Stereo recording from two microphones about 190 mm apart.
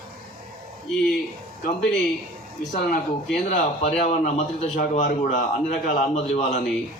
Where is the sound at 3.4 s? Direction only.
35° left (ahead or behind).